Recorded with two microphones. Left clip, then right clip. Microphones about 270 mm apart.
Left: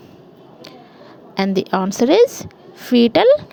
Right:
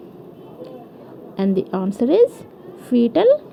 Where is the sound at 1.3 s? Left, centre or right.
Left.